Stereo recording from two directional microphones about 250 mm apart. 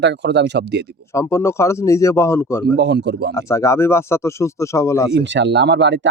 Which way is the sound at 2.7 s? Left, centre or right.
Right.